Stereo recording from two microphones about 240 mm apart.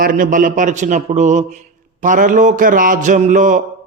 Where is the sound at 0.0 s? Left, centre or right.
Right.